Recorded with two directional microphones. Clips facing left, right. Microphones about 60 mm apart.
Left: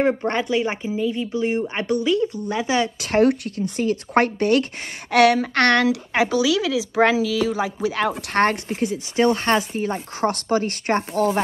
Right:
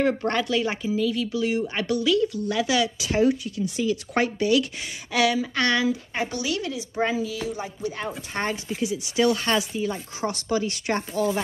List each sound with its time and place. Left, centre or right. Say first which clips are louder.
0.0 s speech: left 3 dB; left
3.0 s a woman's voice: left 4 dB; left
8.2 s speech: left 9 dB; left